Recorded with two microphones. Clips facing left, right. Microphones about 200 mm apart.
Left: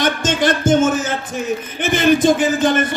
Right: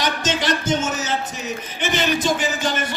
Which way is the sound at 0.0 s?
50° left (ahead or behind).